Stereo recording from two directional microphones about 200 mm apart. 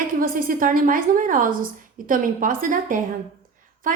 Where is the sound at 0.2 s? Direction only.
45° right (ahead or behind).